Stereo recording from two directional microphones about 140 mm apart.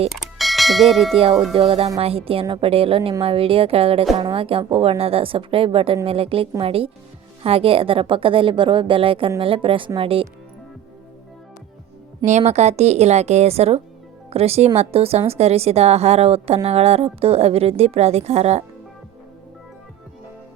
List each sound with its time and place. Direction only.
0.1 s bell: centre (ahead or behind)
1.1 s a woman's voice: 40° right (ahead or behind)
12.2 s a woman's voice: 55° right (ahead or behind)